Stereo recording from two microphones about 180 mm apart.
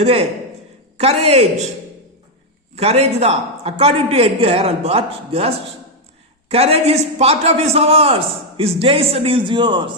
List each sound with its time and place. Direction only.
0.0 s a man's voice: 35° right (ahead or behind)
2.7 s a man's voice: 35° right (ahead or behind)